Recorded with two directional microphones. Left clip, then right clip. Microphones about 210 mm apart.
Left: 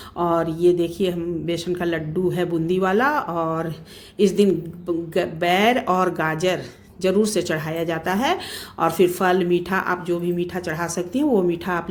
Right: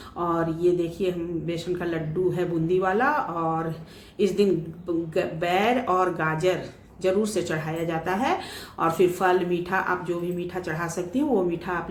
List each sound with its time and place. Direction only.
0.2 s speech: 45° left (ahead or behind)